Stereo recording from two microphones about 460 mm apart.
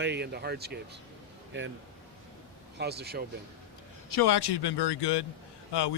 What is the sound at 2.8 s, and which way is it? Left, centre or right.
Speech, right.